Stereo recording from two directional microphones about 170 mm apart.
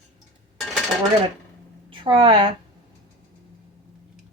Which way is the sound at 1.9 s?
30° right (ahead or behind).